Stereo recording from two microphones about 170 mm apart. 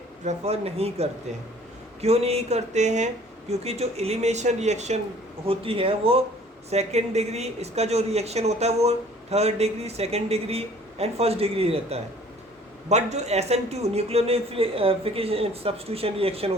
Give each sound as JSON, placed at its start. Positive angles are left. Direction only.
{"t": 0.3, "sound": "speech", "side_deg": -35}